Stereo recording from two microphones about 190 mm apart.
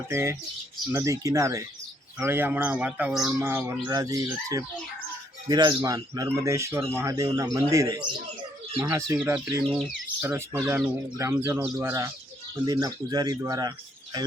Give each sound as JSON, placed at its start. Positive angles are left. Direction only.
{"t": 0.1, "sound": "speech", "side_deg": -15}
{"t": 3.3, "sound": "speech", "side_deg": -10}
{"t": 10.2, "sound": "speech", "side_deg": -15}